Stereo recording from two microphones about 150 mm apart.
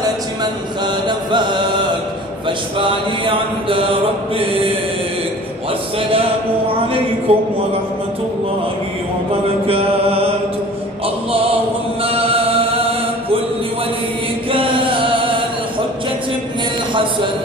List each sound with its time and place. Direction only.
1.0 s chant: 30° right (ahead or behind)
2.8 s mantra: 35° right (ahead or behind)
6.7 s mantra: 40° right (ahead or behind)
9.7 s mantra: 40° right (ahead or behind)
12.0 s chant: 40° right (ahead or behind)
14.5 s chant: 35° right (ahead or behind)